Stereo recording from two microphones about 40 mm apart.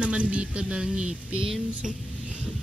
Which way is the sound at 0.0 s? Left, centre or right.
Right.